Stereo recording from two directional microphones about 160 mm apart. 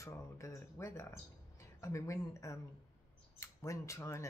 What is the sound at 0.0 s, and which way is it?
Speech, 20° left (ahead or behind).